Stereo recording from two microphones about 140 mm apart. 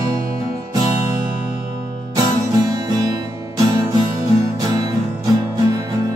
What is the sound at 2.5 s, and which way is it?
Music, 25° right (ahead or behind).